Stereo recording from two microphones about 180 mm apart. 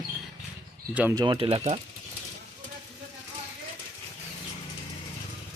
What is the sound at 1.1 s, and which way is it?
Speech, 25° right (ahead or behind).